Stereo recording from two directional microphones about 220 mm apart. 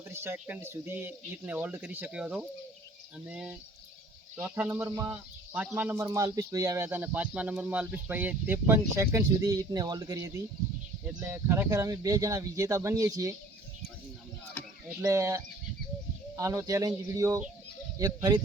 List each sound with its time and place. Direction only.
0.1 s speech: 10° right (ahead or behind)
14.8 s speech: 15° right (ahead or behind)